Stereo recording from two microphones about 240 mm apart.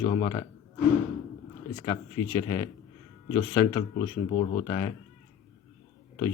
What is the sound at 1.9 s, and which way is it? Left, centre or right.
Speech, left.